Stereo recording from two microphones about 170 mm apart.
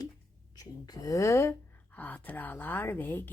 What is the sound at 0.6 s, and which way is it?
A woman's voice, 20° left (ahead or behind).